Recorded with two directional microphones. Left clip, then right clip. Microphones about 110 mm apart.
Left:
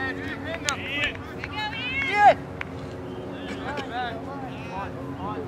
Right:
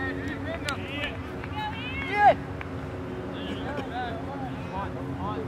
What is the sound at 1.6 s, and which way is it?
Run, 15° left (ahead or behind).